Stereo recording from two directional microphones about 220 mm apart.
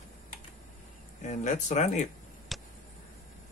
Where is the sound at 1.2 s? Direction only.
35° left (ahead or behind).